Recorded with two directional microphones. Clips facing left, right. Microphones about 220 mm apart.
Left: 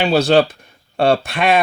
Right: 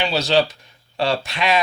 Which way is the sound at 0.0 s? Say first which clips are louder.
Left 6 dB; 50° left (ahead or behind).